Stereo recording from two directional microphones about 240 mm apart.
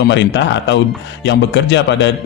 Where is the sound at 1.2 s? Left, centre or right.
Left.